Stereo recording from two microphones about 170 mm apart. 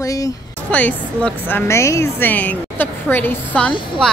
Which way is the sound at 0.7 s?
10° left (ahead or behind).